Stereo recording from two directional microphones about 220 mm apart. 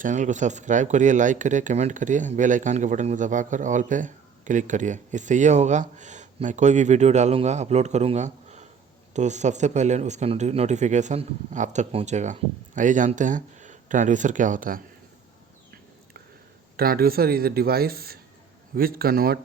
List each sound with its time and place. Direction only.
0.0 s speech: 35° right (ahead or behind)
16.7 s speech: 45° right (ahead or behind)